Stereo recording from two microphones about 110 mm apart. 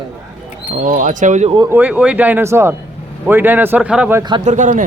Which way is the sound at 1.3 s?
90° right.